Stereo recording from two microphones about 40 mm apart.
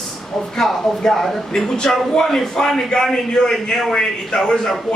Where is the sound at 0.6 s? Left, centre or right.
Centre.